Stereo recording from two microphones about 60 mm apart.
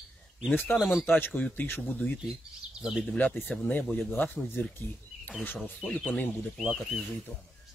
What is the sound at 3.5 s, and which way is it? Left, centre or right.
Speech, centre.